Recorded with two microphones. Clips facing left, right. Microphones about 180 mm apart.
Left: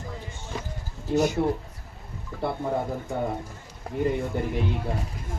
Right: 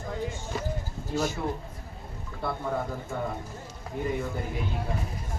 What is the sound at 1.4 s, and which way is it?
Speech, 40° left (ahead or behind).